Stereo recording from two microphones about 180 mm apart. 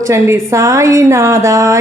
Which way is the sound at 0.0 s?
15° right (ahead or behind).